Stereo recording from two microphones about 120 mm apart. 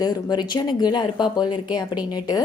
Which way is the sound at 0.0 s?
35° left (ahead or behind).